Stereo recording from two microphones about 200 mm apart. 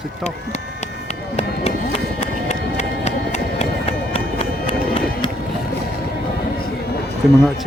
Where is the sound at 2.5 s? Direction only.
35° left (ahead or behind).